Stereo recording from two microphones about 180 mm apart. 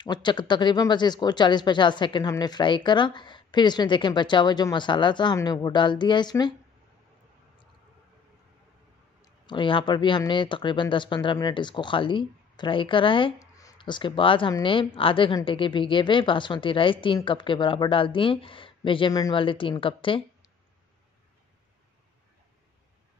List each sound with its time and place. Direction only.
0.0 s speech: 25° left (ahead or behind)
9.2 s speech: 25° left (ahead or behind)